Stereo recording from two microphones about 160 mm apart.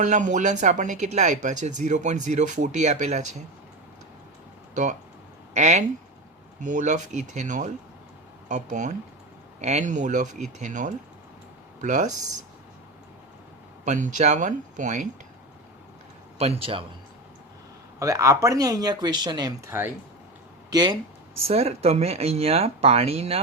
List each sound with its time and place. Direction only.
0.0 s speech: 50° right (ahead or behind)
4.7 s speech: 50° right (ahead or behind)
13.8 s speech: 50° right (ahead or behind)
16.4 s speech: 35° right (ahead or behind)
18.0 s speech: 20° right (ahead or behind)
21.4 s speech: 40° right (ahead or behind)